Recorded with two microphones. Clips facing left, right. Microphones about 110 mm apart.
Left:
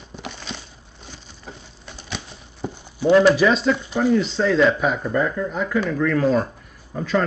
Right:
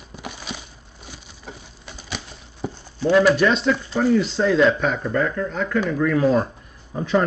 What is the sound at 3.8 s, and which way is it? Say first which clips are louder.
Speech: even; 15° left (ahead or behind).